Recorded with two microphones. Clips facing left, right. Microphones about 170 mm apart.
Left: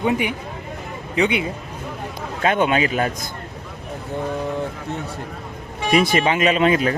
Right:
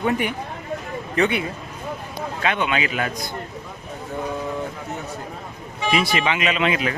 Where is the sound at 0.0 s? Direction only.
15° left (ahead or behind).